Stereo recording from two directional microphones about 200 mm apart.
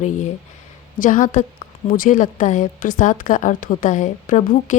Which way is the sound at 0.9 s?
40° left (ahead or behind).